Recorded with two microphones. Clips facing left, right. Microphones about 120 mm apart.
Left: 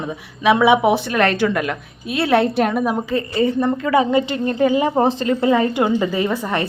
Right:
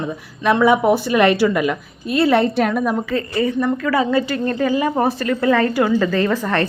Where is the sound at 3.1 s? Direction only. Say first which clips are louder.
Left 1 dB; 30° left (ahead or behind).